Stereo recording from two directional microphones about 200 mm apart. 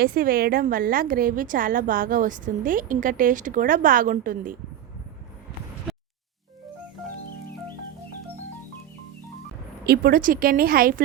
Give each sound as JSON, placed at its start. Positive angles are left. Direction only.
{"t": 0.0, "sound": "a woman's voice", "side_deg": -45}
{"t": 5.9, "sound": "music", "side_deg": 0}
{"t": 9.8, "sound": "a woman's voice", "side_deg": -50}